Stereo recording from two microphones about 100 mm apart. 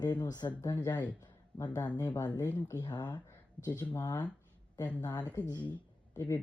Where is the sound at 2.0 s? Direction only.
35° left (ahead or behind).